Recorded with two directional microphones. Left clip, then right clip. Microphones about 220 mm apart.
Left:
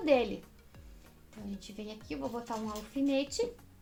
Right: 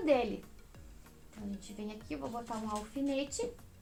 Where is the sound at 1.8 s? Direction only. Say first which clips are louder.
Left 1 dB; 35° left (ahead or behind).